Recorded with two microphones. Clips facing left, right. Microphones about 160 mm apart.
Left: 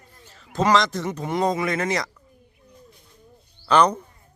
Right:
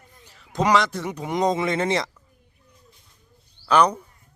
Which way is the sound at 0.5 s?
15° right (ahead or behind).